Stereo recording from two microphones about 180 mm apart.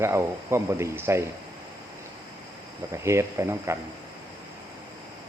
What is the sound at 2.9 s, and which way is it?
Speech, 15° right (ahead or behind).